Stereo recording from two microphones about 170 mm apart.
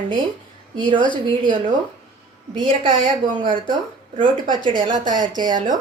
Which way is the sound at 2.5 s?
30° right (ahead or behind).